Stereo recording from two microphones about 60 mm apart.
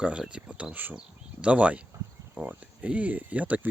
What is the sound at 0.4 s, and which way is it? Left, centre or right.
Speech, right.